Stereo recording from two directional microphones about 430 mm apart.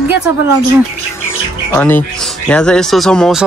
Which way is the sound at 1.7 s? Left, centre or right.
Centre.